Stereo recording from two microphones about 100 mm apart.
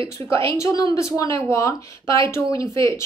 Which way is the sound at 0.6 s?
30° left (ahead or behind).